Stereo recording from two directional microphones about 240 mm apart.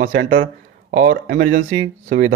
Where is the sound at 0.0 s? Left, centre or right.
Right.